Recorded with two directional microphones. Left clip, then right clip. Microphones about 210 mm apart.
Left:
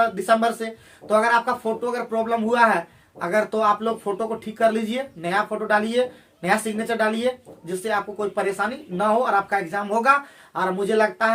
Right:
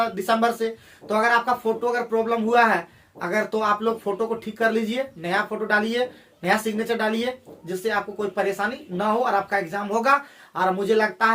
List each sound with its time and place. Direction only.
0.0 s speech: 10° left (ahead or behind)